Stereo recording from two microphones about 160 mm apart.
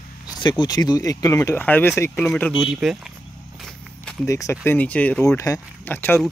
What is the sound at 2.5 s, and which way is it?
Speech, 5° right (ahead or behind).